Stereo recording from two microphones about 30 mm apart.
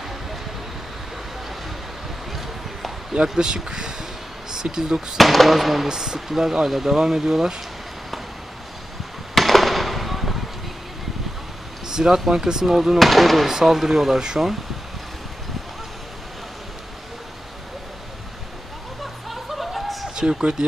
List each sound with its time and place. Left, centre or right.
3.1 s speech: right
3.5 s a sound: right
5.1 s speech: centre
5.9 s speech: centre
9.3 s fireworks: centre
11.9 s speech: centre
13.0 s speech: centre
13.5 s speech: centre
19.2 s a sound: centre
20.2 s speech: right